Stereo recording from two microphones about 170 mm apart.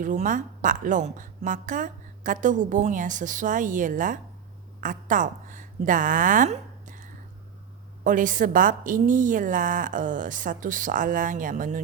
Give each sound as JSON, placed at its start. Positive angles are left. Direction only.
{"t": 0.0, "sound": "a woman's voice", "side_deg": -50}